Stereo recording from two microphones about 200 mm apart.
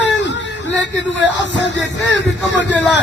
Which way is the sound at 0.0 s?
65° left (ahead or behind).